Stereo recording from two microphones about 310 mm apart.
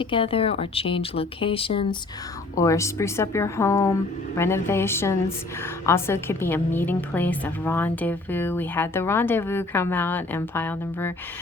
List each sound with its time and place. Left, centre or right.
0.0 s a woman's voice: centre